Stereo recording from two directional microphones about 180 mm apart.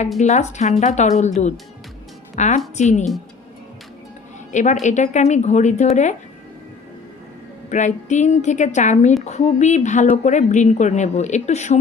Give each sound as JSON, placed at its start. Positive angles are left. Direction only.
{"t": 0.2, "sound": "a woman's voice", "side_deg": 40}
{"t": 4.5, "sound": "a woman's voice", "side_deg": 40}
{"t": 7.7, "sound": "a woman's voice", "side_deg": 40}